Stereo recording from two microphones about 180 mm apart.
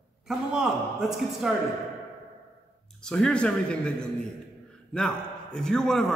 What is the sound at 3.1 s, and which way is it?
A man's voice, 5° left (ahead or behind).